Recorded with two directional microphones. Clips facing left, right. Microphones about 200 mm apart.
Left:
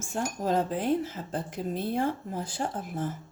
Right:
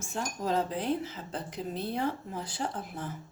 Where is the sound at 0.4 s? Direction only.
45° left (ahead or behind).